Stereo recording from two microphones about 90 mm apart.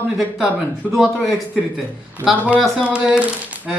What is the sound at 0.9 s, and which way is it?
Speech, 5° left (ahead or behind).